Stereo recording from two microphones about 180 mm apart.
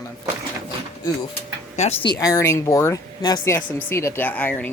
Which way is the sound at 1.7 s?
35° left (ahead or behind).